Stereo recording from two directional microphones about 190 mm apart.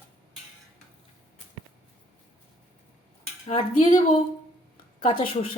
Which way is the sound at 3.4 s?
35° left (ahead or behind).